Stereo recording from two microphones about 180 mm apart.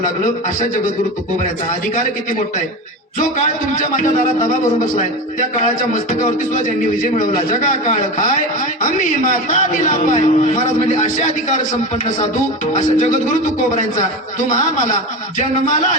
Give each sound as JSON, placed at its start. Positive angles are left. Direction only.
{"t": 3.2, "sound": "a man's voice", "side_deg": 45}
{"t": 5.5, "sound": "a man's voice", "side_deg": 45}